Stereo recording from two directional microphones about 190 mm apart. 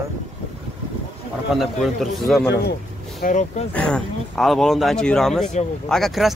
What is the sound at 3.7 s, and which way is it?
Speech, 5° left (ahead or behind).